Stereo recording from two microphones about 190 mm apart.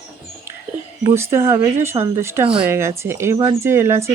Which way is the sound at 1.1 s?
15° right (ahead or behind).